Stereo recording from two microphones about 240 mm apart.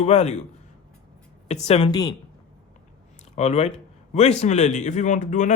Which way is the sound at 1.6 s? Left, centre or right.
Left.